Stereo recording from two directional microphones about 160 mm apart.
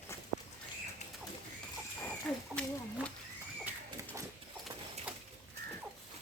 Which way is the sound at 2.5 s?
15° right (ahead or behind).